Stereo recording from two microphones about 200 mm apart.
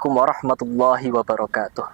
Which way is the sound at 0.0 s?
15° right (ahead or behind).